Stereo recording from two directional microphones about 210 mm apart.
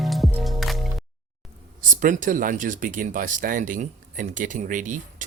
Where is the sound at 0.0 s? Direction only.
Centre (ahead or behind).